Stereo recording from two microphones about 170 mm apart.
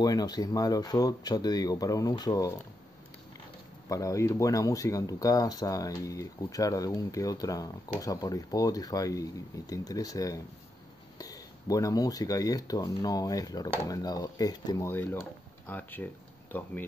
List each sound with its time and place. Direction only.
0.0 s speech: 25° left (ahead or behind)
3.9 s speech: 20° left (ahead or behind)